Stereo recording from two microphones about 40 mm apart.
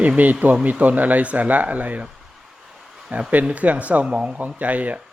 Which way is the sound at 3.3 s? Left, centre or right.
Right.